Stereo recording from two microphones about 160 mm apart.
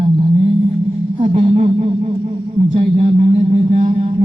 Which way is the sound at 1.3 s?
45° right (ahead or behind).